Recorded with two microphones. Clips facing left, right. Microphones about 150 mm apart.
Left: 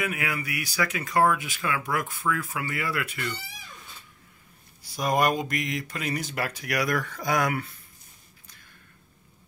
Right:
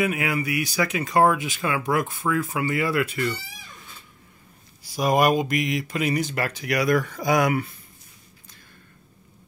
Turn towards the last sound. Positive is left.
turn(degrees=-10)  # may be behind; listen again after turning